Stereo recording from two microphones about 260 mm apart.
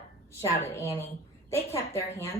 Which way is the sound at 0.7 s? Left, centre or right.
Centre.